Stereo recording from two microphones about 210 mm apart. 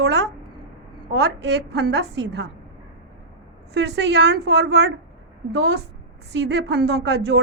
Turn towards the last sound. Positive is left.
turn(degrees=-55)  # may be behind; listen again after turning